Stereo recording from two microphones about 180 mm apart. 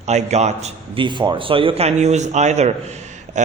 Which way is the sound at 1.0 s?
25° right (ahead or behind).